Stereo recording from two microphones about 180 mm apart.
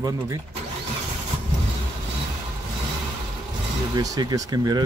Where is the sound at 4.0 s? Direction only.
20° right (ahead or behind).